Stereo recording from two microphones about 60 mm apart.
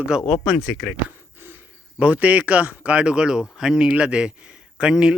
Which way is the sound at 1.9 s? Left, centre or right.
Right.